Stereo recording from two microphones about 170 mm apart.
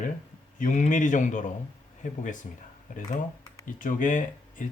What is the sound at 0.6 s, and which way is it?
Speech, 50° left (ahead or behind).